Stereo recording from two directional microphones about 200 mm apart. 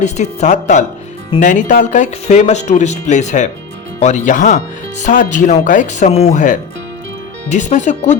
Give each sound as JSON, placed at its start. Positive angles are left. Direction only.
{"t": 0.0, "sound": "speech", "side_deg": 35}